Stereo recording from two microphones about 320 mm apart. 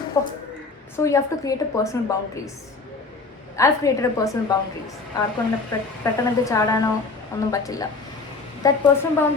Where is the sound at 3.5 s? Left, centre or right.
Centre.